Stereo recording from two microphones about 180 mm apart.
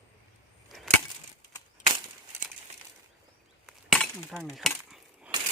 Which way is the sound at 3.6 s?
Centre (ahead or behind).